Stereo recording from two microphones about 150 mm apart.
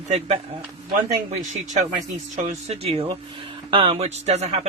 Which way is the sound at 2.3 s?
50° right (ahead or behind).